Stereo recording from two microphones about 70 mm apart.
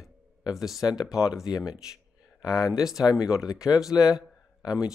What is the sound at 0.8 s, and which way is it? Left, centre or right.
Speech, left.